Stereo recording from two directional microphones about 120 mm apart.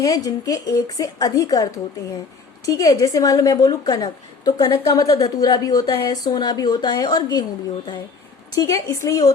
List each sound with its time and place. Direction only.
0.1 s a woman's voice: 30° left (ahead or behind)
8.5 s a woman's voice: 30° left (ahead or behind)